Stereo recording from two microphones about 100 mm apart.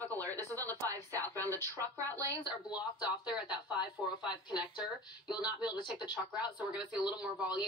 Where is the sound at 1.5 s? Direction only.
20° left (ahead or behind).